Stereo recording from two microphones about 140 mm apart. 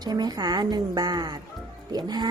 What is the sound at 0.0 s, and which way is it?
A woman's voice, 30° right (ahead or behind).